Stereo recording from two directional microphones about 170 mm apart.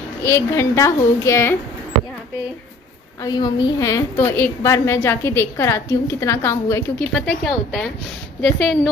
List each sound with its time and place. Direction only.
0.2 s a woman's voice: 15° left (ahead or behind)
3.2 s a woman's voice: 20° left (ahead or behind)
7.2 s a woman's voice: 5° left (ahead or behind)